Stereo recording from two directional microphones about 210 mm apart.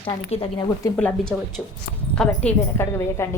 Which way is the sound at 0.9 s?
5° left (ahead or behind).